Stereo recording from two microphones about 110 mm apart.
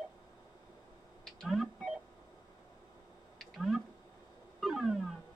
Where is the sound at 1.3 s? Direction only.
Centre (ahead or behind).